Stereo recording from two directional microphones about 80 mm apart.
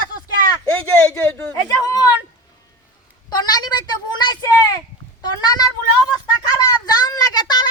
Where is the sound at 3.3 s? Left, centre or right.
Left.